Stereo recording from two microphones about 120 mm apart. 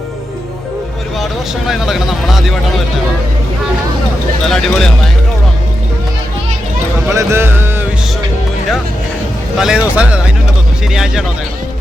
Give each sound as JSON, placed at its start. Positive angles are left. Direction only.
{"t": 1.2, "sound": "speech", "side_deg": 0}
{"t": 4.4, "sound": "speech", "side_deg": 5}
{"t": 7.1, "sound": "music", "side_deg": -25}
{"t": 9.6, "sound": "speech", "side_deg": -5}